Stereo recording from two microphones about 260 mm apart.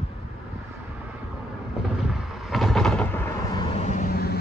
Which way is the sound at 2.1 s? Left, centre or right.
Centre.